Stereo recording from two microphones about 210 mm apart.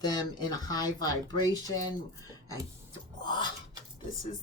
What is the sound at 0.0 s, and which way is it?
A woman's voice, 20° left (ahead or behind).